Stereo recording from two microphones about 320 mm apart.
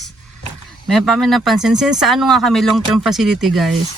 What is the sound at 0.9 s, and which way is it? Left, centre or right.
Speech, centre.